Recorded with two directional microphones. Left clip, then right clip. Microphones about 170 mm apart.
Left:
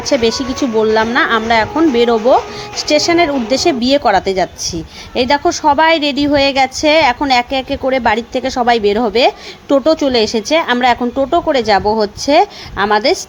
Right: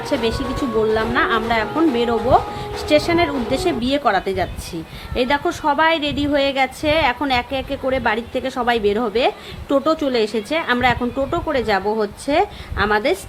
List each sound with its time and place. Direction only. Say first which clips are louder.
0.1 s a woman's voice: left 8 dB; 40° left (ahead or behind)